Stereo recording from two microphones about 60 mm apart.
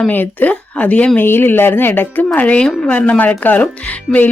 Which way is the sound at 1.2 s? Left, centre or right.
Left.